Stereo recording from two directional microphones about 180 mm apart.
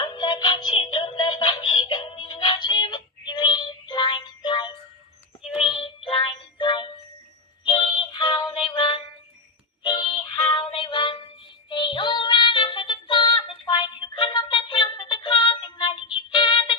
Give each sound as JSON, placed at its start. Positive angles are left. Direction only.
{"t": 0.0, "sound": "synthetic singing", "side_deg": 25}
{"t": 5.6, "sound": "music", "side_deg": 30}